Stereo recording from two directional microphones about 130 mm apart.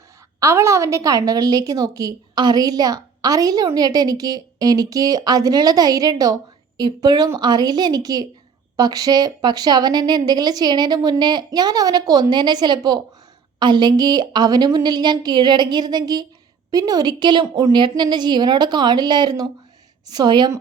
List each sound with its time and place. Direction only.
0.3 s a woman's voice: 25° right (ahead or behind)